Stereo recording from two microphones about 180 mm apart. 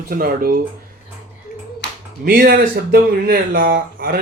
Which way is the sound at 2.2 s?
55° right (ahead or behind).